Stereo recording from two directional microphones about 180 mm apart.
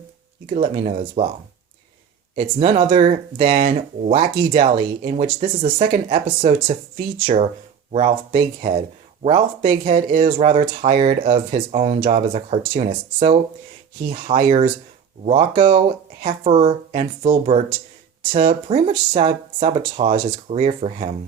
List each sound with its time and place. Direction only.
0.5 s speech: 35° right (ahead or behind)
2.4 s speech: 30° right (ahead or behind)
3.6 s speech: 40° right (ahead or behind)
4.5 s speech: 30° right (ahead or behind)
7.9 s speech: 35° right (ahead or behind)